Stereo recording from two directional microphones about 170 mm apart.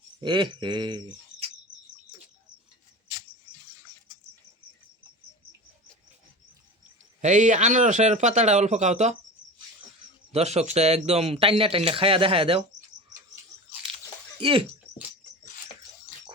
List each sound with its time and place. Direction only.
0.2 s speech: 25° right (ahead or behind)
7.2 s a man's voice: 45° right (ahead or behind)
10.3 s speech: 40° right (ahead or behind)
14.4 s speech: 30° right (ahead or behind)